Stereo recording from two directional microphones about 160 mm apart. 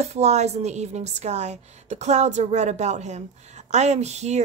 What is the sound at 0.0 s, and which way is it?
A woman's voice, 45° right (ahead or behind).